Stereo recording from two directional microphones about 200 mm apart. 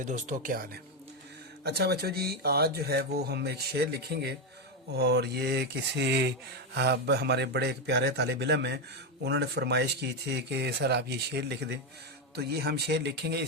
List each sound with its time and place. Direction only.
0.0 s speech: 40° right (ahead or behind); by 13.5 s 55° right (ahead or behind)